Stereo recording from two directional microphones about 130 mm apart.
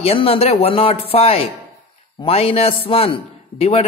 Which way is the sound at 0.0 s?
50° left (ahead or behind).